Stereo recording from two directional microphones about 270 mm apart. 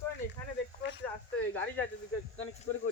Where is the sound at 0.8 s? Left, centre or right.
Left.